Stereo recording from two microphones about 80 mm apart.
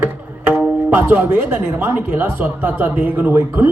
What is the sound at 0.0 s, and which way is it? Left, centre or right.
Tabla, right.